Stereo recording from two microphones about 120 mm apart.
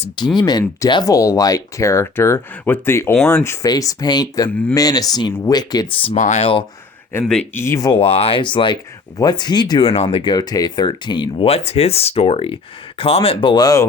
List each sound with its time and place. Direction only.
0.3 s speech: 35° left (ahead or behind)
1.1 s speech: 30° left (ahead or behind)
6.1 s speech: 80° left
7.1 s speech: 20° left (ahead or behind)
7.9 s speech: 50° left (ahead or behind); by 9.8 s 35° left (ahead or behind)
9.8 s speech: 60° left (ahead or behind)
10.2 s speech: 35° left (ahead or behind)
11.4 s speech: 55° left (ahead or behind); by 13.8 s 30° left (ahead or behind)